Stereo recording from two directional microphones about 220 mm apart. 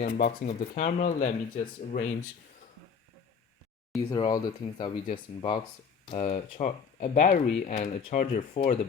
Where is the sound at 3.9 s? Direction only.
15° left (ahead or behind).